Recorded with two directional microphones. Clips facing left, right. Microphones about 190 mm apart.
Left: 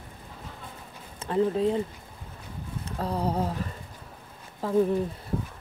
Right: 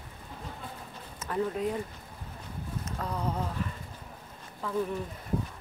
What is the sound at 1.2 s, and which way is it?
Speech, 30° left (ahead or behind).